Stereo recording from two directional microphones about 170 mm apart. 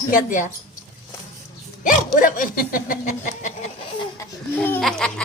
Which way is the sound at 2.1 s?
50° left (ahead or behind).